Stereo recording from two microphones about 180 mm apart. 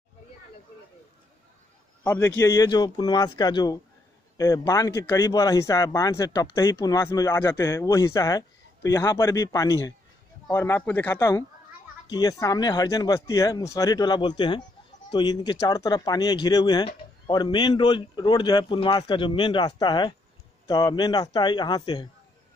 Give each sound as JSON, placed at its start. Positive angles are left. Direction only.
{"t": 2.0, "sound": "a man's voice", "side_deg": 15}